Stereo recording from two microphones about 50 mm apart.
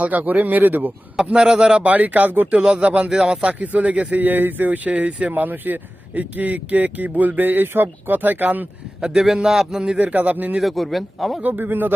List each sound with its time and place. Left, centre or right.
0.0 s speech: right
1.1 s a man's voice: centre
1.8 s speech: right
2.5 s speech: right
3.4 s speech: right
5.3 s speech: right
9.0 s a man's voice: centre
10.0 s speech: right
10.6 s speech: centre
11.4 s speech: right